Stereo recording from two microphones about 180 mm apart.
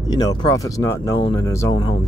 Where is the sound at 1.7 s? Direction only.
30° left (ahead or behind).